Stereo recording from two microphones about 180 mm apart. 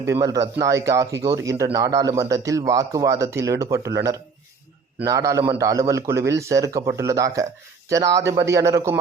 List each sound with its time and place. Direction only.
0.0 s a man's voice: 15° right (ahead or behind)